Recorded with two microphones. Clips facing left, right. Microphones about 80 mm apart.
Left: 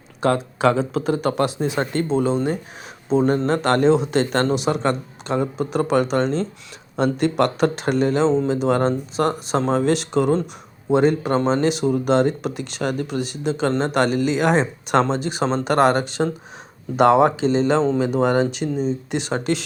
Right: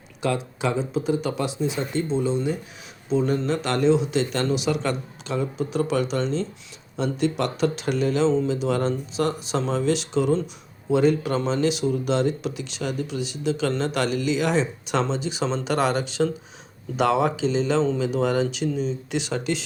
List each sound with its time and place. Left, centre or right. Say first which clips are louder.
0.2 s speech: left 6 dB; left
0.7 s speech: left 1 dB; left
5.4 s speech: left 2 dB; left